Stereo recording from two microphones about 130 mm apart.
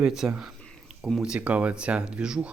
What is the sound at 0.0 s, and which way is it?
Speech, 5° right (ahead or behind).